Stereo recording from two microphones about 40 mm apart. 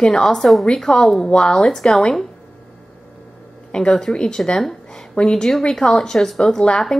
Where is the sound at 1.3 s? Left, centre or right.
Left.